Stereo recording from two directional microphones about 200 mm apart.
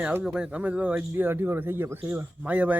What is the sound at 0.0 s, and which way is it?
A man's voice, 5° right (ahead or behind).